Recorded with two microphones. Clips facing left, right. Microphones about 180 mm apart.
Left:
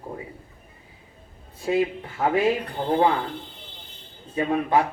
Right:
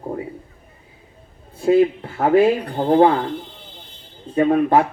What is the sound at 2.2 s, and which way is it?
Speech, 40° right (ahead or behind).